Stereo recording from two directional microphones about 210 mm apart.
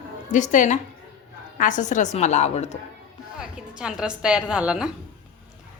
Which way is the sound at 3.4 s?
5° right (ahead or behind).